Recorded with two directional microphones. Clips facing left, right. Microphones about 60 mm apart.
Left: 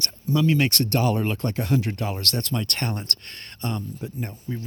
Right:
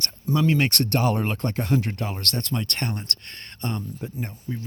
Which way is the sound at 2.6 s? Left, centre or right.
Right.